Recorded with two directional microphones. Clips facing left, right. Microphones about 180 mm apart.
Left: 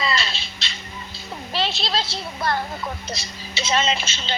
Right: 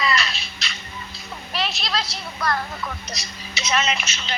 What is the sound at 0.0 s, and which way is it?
Music, 30° left (ahead or behind).